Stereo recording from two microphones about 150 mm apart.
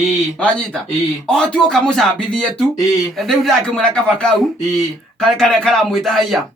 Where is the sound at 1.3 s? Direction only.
5° left (ahead or behind).